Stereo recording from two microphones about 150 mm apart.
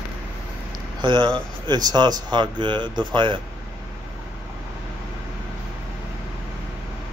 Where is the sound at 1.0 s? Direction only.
30° right (ahead or behind).